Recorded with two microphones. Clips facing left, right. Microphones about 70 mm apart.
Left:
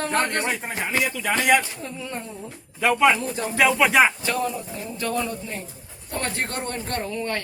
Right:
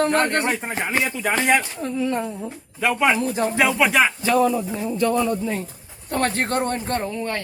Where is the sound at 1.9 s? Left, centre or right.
Right.